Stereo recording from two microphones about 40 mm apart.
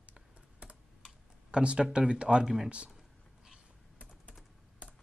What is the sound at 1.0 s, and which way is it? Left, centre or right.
Tick-tock, right.